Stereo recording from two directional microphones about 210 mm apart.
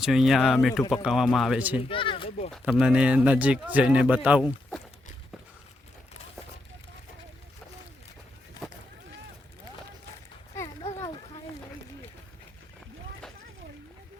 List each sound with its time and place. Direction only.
0.0 s speech: centre (ahead or behind)
1.9 s a sound: 25° left (ahead or behind)
2.5 s speech: centre (ahead or behind)